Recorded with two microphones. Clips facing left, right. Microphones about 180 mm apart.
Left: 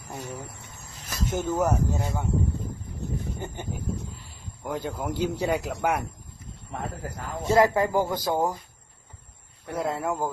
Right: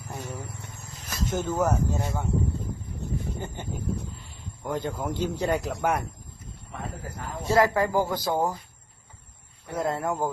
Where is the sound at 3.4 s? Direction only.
15° left (ahead or behind).